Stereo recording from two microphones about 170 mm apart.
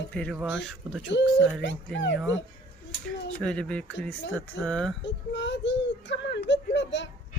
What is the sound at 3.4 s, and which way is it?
Speech, 5° left (ahead or behind).